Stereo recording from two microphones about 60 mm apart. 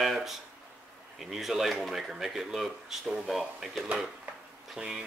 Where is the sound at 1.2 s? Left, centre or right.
Centre.